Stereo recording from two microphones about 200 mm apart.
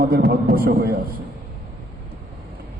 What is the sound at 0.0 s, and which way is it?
Speech, 50° right (ahead or behind).